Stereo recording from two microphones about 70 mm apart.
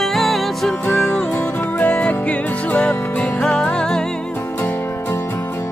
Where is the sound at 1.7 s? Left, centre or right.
Left.